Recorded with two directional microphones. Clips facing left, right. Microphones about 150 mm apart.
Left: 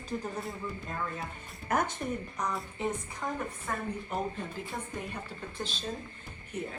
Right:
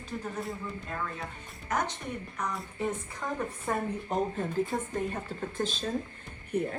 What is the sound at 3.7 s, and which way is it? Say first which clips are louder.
Speech: right 6 dB; 25° right (ahead or behind).